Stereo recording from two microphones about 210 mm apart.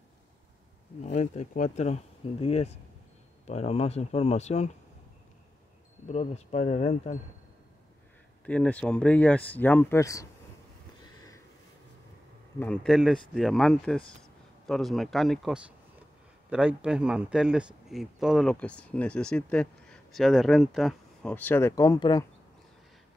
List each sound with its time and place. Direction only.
1.0 s speech: 35° left (ahead or behind)
6.0 s speech: 30° left (ahead or behind)
8.5 s speech: 5° left (ahead or behind)
11.1 s a sound: 15° left (ahead or behind)
12.5 s speech: 5° left (ahead or behind)